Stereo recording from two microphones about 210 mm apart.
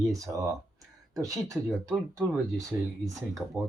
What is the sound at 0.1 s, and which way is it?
Speech, 15° right (ahead or behind).